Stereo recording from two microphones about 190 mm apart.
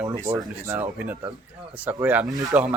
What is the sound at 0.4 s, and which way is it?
Speech, 10° right (ahead or behind).